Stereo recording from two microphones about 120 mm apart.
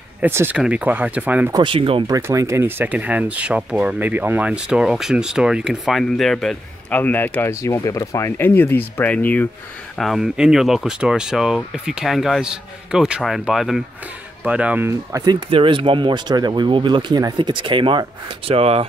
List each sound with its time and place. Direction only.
0.2 s speech: 15° right (ahead or behind)
1.5 s speech: 45° right (ahead or behind)
2.0 s speech: 30° right (ahead or behind); by 6.5 s 5° left (ahead or behind)
6.9 s speech: 15° left (ahead or behind)
9.9 s speech: centre (ahead or behind)
14.9 s speech: 25° right (ahead or behind)
15.5 s speech: 45° right (ahead or behind)